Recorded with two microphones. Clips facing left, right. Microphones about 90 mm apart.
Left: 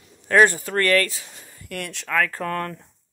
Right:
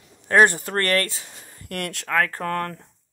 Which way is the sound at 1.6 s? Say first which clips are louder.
Right 2 dB; 60° right (ahead or behind).